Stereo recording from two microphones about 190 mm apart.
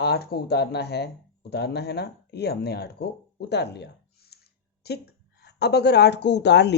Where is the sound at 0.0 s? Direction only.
60° left (ahead or behind).